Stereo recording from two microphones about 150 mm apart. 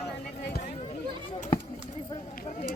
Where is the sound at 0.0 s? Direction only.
90° left.